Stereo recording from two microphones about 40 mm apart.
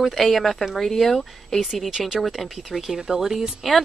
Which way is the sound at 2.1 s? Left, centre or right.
Centre.